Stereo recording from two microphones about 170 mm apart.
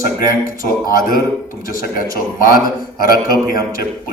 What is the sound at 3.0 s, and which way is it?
Speech, 55° left (ahead or behind).